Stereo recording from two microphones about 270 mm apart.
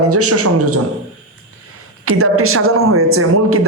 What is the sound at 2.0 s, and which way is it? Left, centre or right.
Speech, right.